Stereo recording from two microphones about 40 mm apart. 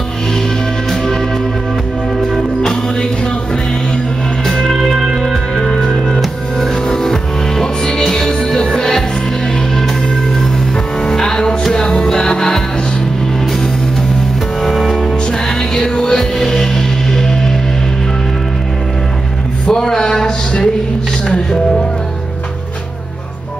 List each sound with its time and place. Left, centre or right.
2.6 s music: centre
4.5 s music: centre
11.1 s music: centre
14.6 s music: centre
15.7 s music: centre
19.6 s a sound: centre
21.3 s music: centre